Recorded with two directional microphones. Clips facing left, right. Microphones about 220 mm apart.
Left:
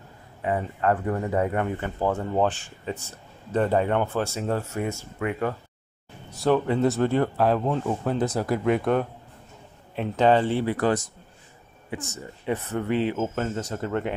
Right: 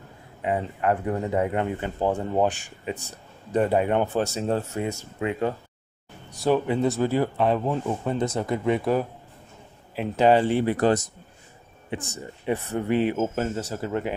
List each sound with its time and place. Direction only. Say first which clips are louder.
0.4 s speech: even; 20° right (ahead or behind)
6.4 s speech: left 1 dB; 5° right (ahead or behind)
12.1 s speech: right 1 dB; 15° right (ahead or behind)